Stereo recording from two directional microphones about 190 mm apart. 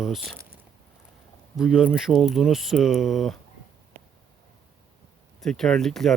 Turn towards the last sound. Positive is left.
turn(degrees=0)  # may be behind; listen again after turning